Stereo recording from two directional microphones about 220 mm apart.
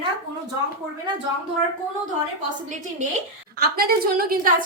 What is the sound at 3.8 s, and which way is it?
Speech, 45° right (ahead or behind).